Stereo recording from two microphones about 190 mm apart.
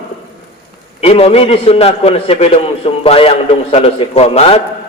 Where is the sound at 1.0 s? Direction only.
30° left (ahead or behind).